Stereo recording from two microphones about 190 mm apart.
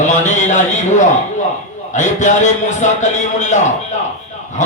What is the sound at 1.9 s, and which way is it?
Speech, 40° left (ahead or behind).